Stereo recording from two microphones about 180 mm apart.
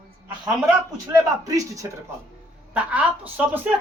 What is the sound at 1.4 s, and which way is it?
Speech, 20° right (ahead or behind).